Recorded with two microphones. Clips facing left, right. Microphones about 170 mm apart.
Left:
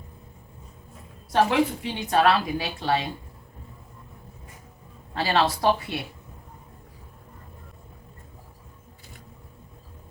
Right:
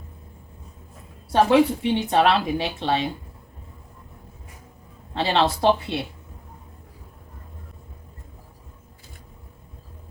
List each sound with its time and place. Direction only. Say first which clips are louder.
1.3 s speech: right 4 dB; 25° right (ahead or behind)
5.1 s speech: right 2 dB; 25° right (ahead or behind)